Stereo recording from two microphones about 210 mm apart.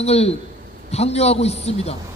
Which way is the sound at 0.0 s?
30° left (ahead or behind).